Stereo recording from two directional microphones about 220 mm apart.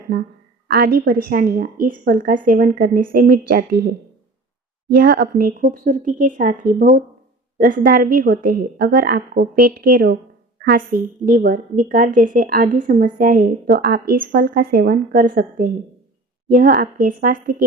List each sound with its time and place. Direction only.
0.7 s a woman's voice: 45° right (ahead or behind)